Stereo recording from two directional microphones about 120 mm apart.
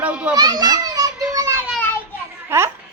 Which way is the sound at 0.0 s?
10° right (ahead or behind).